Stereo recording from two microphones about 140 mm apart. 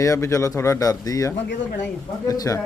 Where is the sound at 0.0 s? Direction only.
20° left (ahead or behind).